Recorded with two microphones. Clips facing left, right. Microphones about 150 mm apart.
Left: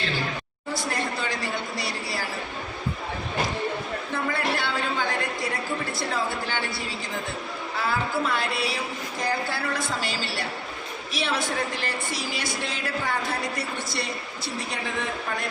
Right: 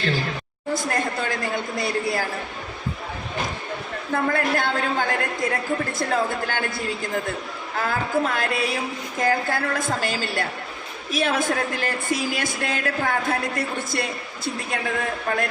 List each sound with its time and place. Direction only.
0.7 s a woman's voice: 50° right (ahead or behind)
4.1 s a woman's voice: 50° right (ahead or behind)